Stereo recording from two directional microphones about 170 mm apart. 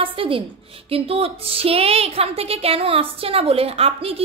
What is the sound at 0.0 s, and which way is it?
A woman's voice, 30° right (ahead or behind).